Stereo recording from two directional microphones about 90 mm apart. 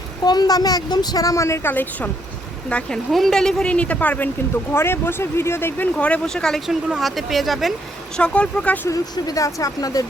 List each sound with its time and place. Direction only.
0.3 s a woman's voice: 50° left (ahead or behind); by 3.0 s 15° left (ahead or behind)
3.1 s speech: centre (ahead or behind)
8.1 s speech: 10° left (ahead or behind)
8.9 s speech: 40° left (ahead or behind)